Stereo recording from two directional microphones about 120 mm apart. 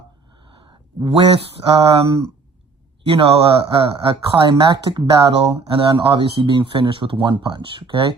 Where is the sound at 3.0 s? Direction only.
50° right (ahead or behind).